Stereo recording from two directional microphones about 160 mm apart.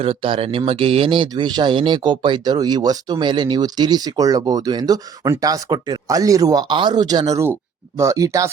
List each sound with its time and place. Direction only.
0.0 s speech: 35° right (ahead or behind)